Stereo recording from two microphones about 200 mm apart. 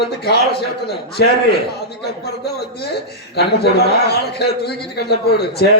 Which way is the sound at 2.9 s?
55° left (ahead or behind).